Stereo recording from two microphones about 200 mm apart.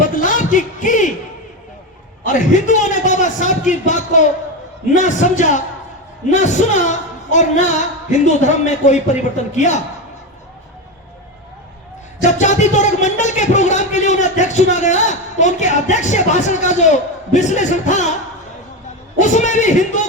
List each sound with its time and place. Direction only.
0.0 s music: 40° left (ahead or behind)
2.2 s a man's voice: 40° left (ahead or behind)
12.2 s a man's voice: 35° left (ahead or behind)
19.2 s a man's voice: 35° left (ahead or behind)